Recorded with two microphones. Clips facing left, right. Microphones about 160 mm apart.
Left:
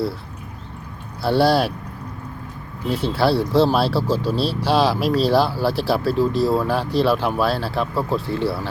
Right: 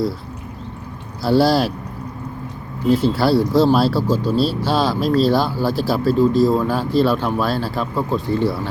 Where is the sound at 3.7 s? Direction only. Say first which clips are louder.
Right 3 dB; 5° left (ahead or behind).